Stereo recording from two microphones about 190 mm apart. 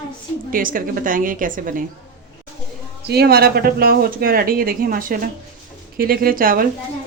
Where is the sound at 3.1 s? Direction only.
55° right (ahead or behind).